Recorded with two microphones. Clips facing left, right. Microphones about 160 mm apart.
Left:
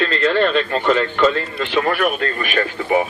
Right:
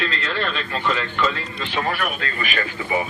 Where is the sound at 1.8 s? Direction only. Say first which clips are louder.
Left 7 dB; 50° left (ahead or behind).